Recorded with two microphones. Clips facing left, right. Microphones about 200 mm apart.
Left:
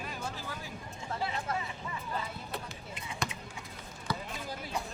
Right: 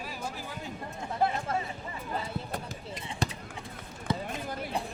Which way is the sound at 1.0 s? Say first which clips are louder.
Right 7 dB; 55° right (ahead or behind).